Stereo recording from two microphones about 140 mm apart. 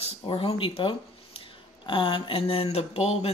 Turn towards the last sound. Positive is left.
turn(degrees=45)  # may be behind; listen again after turning